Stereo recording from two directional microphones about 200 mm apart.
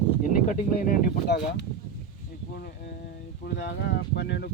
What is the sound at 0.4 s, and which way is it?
Speech, 45° left (ahead or behind).